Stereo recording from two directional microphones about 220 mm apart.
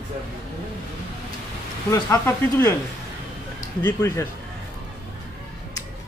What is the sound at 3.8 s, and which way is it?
Speech, 15° left (ahead or behind).